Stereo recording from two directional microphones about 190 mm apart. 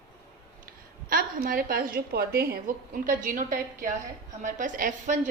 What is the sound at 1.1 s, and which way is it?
A woman's voice, 50° right (ahead or behind).